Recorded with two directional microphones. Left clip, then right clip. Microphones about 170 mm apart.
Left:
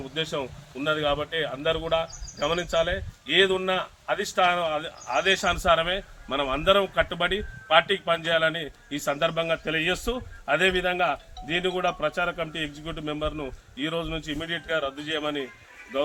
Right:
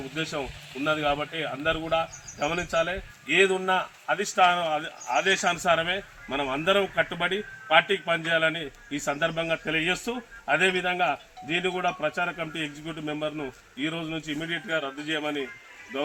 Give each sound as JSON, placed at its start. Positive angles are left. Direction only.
{"t": 0.9, "sound": "speech", "side_deg": 25}
{"t": 4.0, "sound": "a man's voice", "side_deg": 0}